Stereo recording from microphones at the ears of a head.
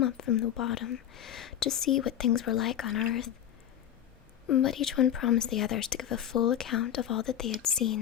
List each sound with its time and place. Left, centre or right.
0.0 s speech: left
4.4 s speech: left